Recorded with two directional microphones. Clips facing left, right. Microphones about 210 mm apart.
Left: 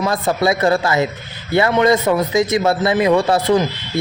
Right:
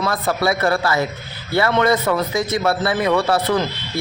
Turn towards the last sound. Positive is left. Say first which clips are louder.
# left 3 dB
turn(degrees=20)  # may be behind; listen again after turning